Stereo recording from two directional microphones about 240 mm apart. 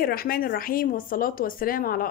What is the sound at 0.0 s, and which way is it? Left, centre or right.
Speech, left.